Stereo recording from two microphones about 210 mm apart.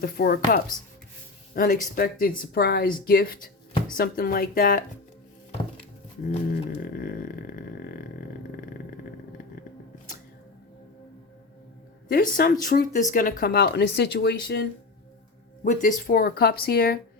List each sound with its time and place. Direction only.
0.0 s speech: 45° left (ahead or behind)
6.8 s a sound: 45° left (ahead or behind)
12.0 s speech: 50° left (ahead or behind)
15.6 s speech: 40° left (ahead or behind)